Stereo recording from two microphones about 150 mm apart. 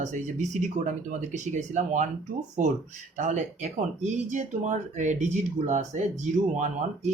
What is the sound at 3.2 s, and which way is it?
Speech, 55° right (ahead or behind).